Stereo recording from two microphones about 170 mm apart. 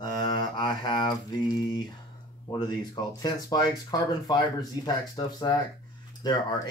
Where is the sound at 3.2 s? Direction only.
20° left (ahead or behind).